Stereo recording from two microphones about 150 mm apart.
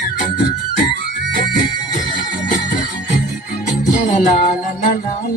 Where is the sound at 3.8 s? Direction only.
55° left (ahead or behind).